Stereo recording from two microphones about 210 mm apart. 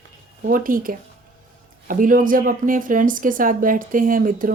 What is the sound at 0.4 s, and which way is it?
Speech, 40° right (ahead or behind).